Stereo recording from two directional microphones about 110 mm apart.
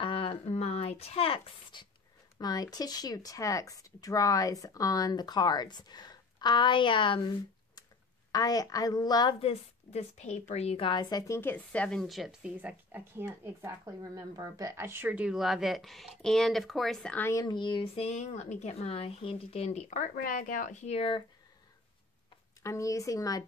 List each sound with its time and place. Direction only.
0.0 s a sound: 55° left (ahead or behind)
0.6 s a sound: 70° left (ahead or behind); by 1.9 s 50° left (ahead or behind)
2.3 s speech: 35° left (ahead or behind)
9.4 s a woman's voice: 85° left
10.8 s speech: 45° left (ahead or behind); by 11.5 s 25° left (ahead or behind)
11.5 s a woman's voice: 10° left (ahead or behind); by 13.7 s 20° right (ahead or behind)
13.8 s speech: 35° right (ahead or behind); by 15.3 s 15° right (ahead or behind)
15.3 s speech: centre (ahead or behind)
17.3 s speech: 35° left (ahead or behind)
17.9 s speech: 90° left; by 21.2 s 65° left (ahead or behind)
22.6 s speech: 30° left (ahead or behind)